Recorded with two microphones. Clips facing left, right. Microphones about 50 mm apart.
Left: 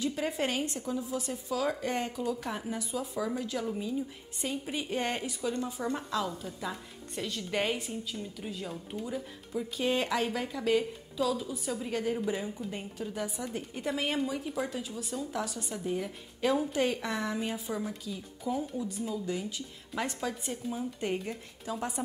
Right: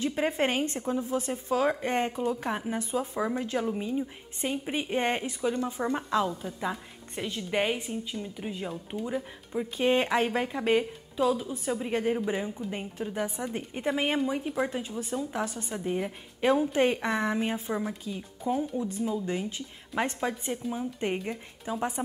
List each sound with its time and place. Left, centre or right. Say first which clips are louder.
0.0 s a woman's voice: right 4 dB; right